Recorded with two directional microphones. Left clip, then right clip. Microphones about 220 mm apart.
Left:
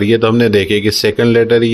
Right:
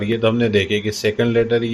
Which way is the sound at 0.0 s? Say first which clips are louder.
Left 7 dB; 50° left (ahead or behind).